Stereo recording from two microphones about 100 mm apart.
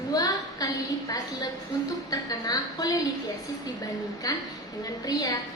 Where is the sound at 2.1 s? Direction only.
40° left (ahead or behind).